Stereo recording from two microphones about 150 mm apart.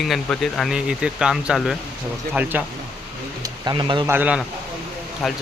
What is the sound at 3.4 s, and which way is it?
Speech, 30° right (ahead or behind).